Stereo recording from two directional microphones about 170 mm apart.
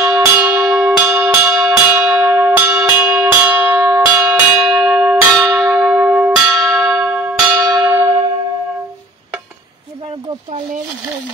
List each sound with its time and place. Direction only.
0.0 s bell: 15° right (ahead or behind)
7.7 s church bell: 20° right (ahead or behind)